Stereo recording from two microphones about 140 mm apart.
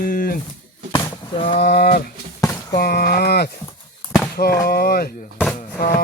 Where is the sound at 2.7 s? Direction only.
90° left.